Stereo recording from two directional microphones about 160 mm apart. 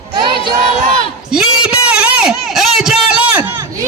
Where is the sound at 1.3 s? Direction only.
5° right (ahead or behind).